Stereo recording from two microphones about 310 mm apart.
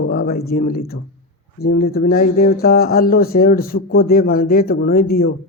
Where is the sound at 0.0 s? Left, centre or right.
Left.